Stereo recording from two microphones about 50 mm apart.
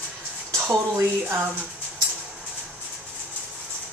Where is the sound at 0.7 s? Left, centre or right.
Right.